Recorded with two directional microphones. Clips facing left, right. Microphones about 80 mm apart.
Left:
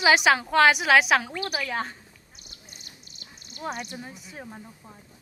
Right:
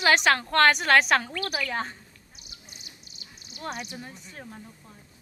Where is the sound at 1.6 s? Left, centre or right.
Centre.